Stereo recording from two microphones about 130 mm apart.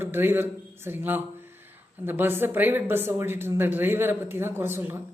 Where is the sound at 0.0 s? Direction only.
15° right (ahead or behind).